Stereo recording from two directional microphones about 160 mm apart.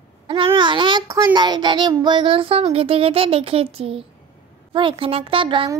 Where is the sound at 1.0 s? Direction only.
25° right (ahead or behind).